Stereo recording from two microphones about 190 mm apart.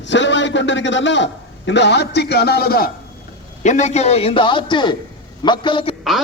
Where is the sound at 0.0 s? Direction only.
70° left (ahead or behind); by 2.9 s 55° left (ahead or behind).